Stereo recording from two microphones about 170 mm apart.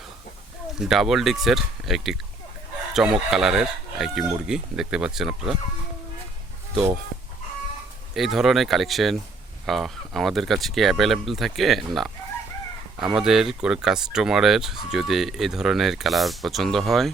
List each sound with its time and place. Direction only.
0.8 s speech: centre (ahead or behind)
8.1 s speech: centre (ahead or behind)